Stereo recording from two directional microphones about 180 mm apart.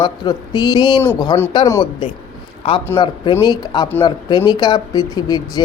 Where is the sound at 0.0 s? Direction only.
25° left (ahead or behind).